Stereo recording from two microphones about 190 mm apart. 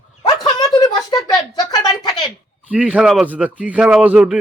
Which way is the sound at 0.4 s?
20° left (ahead or behind).